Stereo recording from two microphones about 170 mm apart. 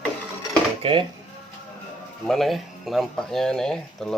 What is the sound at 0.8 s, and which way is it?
Speech, 30° right (ahead or behind).